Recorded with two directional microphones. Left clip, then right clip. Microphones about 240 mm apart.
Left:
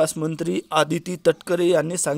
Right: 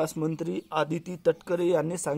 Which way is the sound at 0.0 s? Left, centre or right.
Centre.